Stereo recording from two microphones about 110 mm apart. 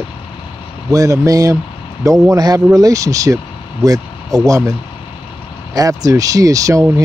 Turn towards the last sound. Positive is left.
turn(degrees=-30)  # may be behind; listen again after turning